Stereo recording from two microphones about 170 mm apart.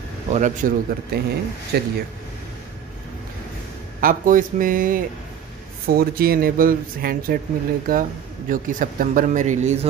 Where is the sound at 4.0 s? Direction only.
55° right (ahead or behind).